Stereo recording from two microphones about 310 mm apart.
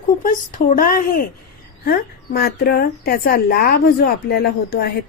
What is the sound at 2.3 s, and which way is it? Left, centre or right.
A woman's voice, left.